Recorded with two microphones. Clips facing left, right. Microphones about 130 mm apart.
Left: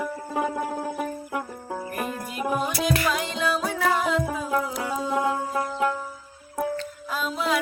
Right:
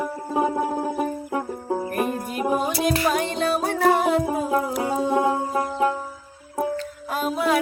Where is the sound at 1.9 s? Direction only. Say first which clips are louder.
Right 6 dB; 50° right (ahead or behind).